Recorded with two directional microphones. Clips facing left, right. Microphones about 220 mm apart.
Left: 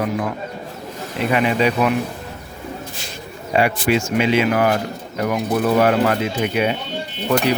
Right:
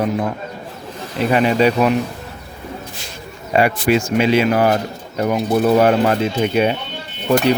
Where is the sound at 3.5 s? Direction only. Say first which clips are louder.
Right 2 dB; 45° right (ahead or behind).